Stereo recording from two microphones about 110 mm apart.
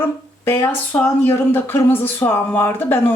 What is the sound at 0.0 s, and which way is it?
Speech, 20° left (ahead or behind).